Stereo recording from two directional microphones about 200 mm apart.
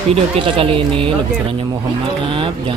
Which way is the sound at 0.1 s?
25° right (ahead or behind).